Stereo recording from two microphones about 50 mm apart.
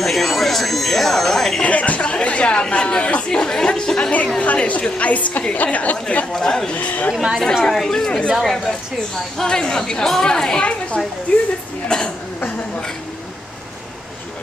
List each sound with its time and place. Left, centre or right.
0.0 s speech: centre
1.6 s speech: left
4.4 s a woman's voice: left
6.3 s a woman's voice: centre
6.7 s a woman's voice: left
7.6 s a woman's voice: centre
8.1 s a woman's voice: centre
8.4 s a woman's voice: centre
12.4 s a woman's voice: left